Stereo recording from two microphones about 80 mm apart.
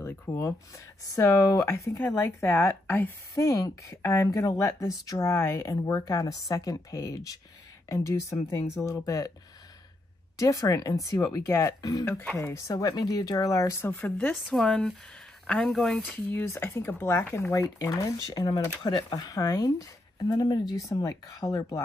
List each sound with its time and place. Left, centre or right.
0.0 s speech: left
2.0 s a woman's voice: left
3.3 s speech: left
5.3 s speech: left
7.9 s speech: left
10.3 s speech: left
13.8 s a woman's voice: left
14.3 s speech: centre
15.7 s speech: centre
16.0 s a woman's voice: left
17.5 s speech: left
20.7 s speech: left